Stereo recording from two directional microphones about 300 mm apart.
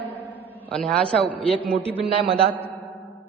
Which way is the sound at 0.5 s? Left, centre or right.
Centre.